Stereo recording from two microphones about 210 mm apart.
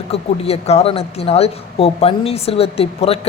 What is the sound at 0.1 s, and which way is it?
Speech, 30° left (ahead or behind).